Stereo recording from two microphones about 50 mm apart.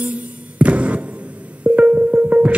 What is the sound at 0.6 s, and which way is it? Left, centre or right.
Music, right.